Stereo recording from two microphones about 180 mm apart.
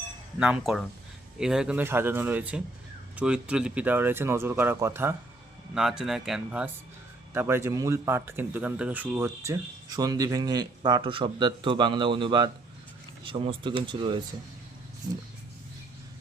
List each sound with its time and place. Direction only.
0.3 s speech: 5° right (ahead or behind)
5.7 s speech: 5° right (ahead or behind); by 14.2 s 25° right (ahead or behind)